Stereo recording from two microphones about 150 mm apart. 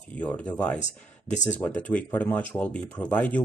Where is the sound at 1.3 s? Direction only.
55° left (ahead or behind).